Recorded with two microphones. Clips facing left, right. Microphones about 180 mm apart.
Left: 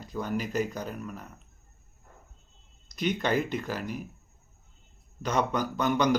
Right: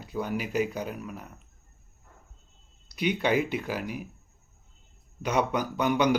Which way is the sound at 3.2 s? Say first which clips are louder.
Right 3 dB; 10° right (ahead or behind).